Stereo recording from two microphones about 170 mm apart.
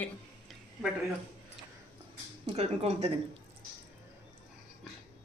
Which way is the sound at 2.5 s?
40° right (ahead or behind).